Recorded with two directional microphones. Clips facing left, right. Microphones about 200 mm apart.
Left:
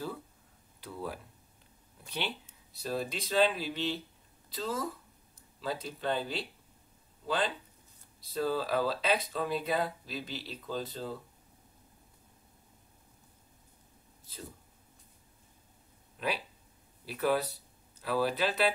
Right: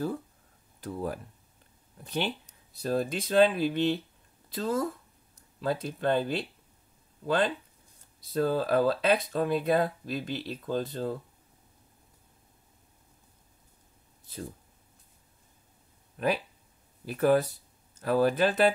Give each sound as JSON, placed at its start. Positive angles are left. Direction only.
{"t": 0.7, "sound": "speech", "side_deg": -45}
{"t": 16.2, "sound": "speech", "side_deg": -50}